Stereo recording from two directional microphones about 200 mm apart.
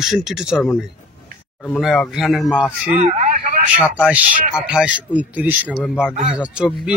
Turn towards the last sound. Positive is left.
turn(degrees=-5)  # may be behind; listen again after turning